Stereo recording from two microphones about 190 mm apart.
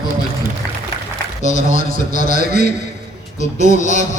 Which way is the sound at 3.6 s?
40° left (ahead or behind).